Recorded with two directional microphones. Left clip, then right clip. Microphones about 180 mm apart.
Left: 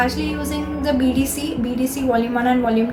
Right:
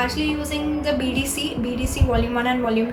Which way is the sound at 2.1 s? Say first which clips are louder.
Left 2 dB; 20° right (ahead or behind).